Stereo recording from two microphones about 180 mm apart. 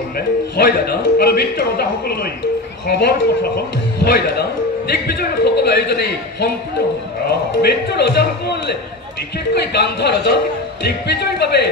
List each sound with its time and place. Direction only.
0.6 s a man's voice: 60° left (ahead or behind)